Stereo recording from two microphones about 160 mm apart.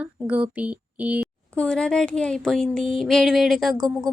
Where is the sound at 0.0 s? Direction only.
10° right (ahead or behind).